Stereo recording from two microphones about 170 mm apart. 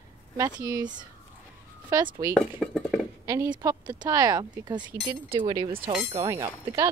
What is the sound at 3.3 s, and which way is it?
Speech, 15° right (ahead or behind).